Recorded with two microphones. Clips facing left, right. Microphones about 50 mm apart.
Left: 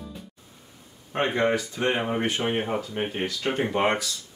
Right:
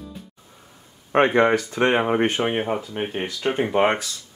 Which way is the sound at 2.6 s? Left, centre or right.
Centre.